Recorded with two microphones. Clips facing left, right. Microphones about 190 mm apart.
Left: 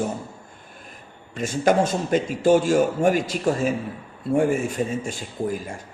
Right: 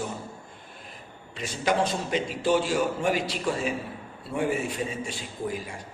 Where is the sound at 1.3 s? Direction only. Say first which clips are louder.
Left 7 dB; 50° left (ahead or behind).